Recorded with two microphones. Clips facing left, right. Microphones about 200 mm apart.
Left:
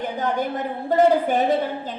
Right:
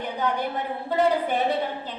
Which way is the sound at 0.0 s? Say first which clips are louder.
Left 3 dB; 45° left (ahead or behind).